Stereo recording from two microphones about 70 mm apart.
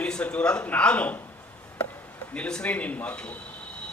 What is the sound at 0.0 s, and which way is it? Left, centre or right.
Speech, centre.